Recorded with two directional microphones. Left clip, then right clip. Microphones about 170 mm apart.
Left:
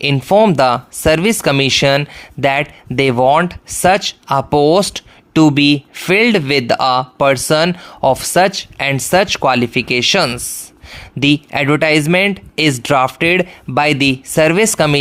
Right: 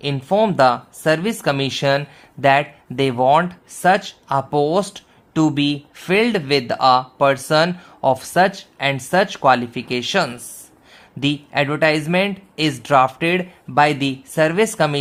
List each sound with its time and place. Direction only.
0.0 s speech: 40° left (ahead or behind)